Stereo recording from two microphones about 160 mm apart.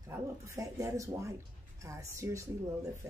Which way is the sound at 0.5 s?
20° right (ahead or behind).